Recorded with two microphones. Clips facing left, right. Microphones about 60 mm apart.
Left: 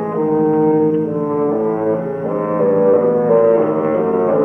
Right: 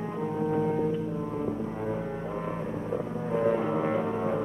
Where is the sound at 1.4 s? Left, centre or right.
Left.